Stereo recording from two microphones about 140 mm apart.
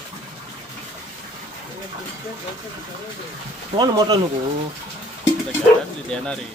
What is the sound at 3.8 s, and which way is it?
Speech, 30° right (ahead or behind).